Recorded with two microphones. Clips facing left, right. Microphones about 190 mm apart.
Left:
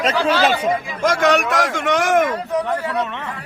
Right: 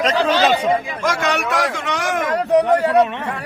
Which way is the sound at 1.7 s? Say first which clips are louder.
Left 5 dB; 50° left (ahead or behind).